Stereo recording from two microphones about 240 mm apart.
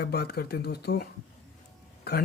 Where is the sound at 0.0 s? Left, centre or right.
Left.